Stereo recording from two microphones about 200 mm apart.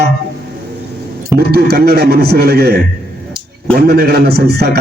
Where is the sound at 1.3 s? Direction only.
50° right (ahead or behind).